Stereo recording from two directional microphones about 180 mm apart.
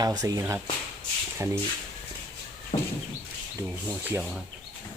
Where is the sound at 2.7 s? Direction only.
30° left (ahead or behind).